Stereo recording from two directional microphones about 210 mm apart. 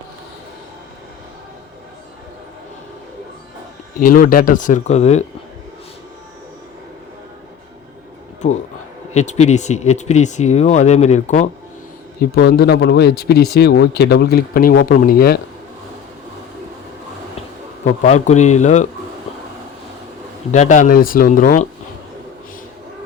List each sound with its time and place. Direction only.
4.0 s speech: 40° left (ahead or behind)
8.4 s speech: 35° left (ahead or behind)
12.2 s speech: 50° left (ahead or behind)
17.8 s speech: 35° left (ahead or behind)
20.5 s speech: 35° left (ahead or behind)